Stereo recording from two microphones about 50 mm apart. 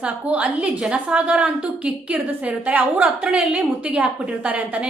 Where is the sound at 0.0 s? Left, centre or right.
Right.